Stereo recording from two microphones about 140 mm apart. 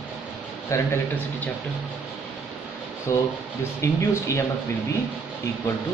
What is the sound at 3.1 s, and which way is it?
Speech, 20° left (ahead or behind).